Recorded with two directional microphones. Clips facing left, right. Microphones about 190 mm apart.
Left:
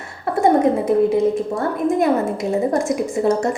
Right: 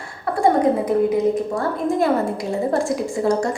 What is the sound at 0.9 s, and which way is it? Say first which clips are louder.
Speech: left 4 dB; 20° left (ahead or behind).